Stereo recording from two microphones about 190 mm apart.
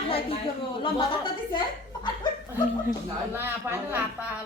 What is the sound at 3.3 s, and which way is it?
Speech, 10° right (ahead or behind).